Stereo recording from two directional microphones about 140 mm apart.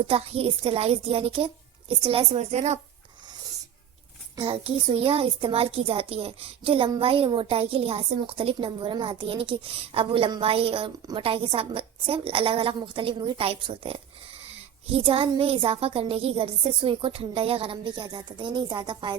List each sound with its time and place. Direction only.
0.1 s a woman's voice: 45° right (ahead or behind)
2.4 s a woman's voice: 50° right (ahead or behind)
4.4 s a child's voice: 40° right (ahead or behind)